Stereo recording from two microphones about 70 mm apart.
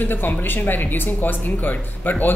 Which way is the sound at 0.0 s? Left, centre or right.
Left.